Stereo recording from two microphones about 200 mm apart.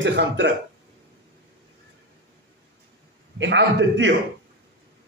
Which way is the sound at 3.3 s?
65° right (ahead or behind).